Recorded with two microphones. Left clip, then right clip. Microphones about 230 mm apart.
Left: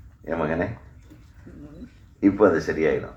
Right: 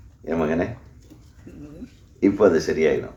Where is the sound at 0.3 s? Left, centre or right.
Right.